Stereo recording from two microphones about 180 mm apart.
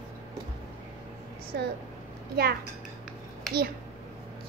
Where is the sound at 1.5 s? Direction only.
60° right (ahead or behind).